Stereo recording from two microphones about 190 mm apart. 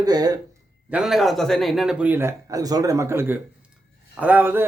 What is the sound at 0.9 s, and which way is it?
Speech, 5° right (ahead or behind).